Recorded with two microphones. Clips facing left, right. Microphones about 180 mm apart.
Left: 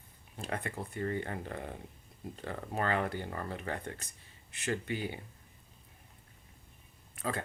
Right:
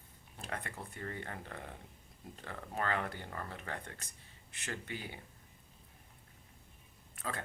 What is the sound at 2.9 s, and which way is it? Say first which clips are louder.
Speech: left 5 dB; 35° left (ahead or behind).